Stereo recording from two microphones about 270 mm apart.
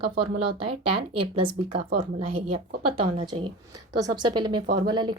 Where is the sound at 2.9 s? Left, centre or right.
Centre.